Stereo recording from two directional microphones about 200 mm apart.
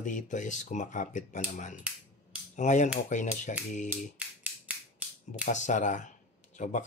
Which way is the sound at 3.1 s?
40° left (ahead or behind).